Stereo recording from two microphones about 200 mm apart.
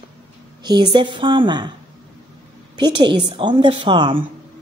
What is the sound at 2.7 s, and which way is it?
A woman's voice, 20° right (ahead or behind).